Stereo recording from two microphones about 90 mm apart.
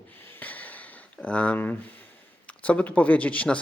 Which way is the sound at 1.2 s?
15° left (ahead or behind).